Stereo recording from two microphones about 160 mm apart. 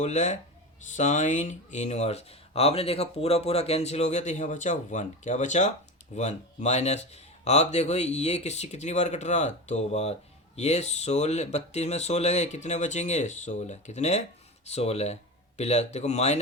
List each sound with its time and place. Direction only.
0.0 s a man's voice: 45° left (ahead or behind)